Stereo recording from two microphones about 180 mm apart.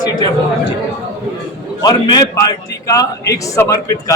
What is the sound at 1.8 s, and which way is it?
A man's voice, 20° left (ahead or behind).